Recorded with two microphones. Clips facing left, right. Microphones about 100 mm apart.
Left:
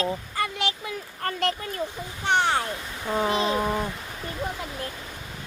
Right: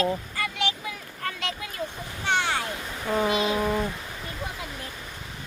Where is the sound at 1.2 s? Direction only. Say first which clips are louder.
Left 6 dB; 50° left (ahead or behind).